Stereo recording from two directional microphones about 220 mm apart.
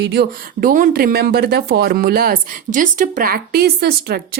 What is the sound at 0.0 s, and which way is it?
Speech, 50° right (ahead or behind).